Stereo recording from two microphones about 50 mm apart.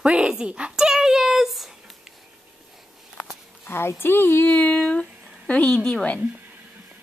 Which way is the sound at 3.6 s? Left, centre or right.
Left.